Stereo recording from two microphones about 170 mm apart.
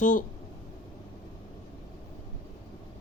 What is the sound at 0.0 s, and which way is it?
Speech, 50° left (ahead or behind).